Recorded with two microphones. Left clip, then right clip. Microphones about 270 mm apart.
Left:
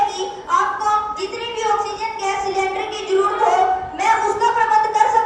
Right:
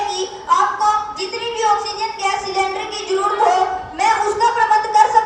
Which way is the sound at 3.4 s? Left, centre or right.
Right.